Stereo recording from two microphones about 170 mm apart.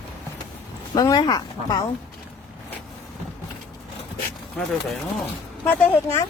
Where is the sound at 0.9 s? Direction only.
20° left (ahead or behind).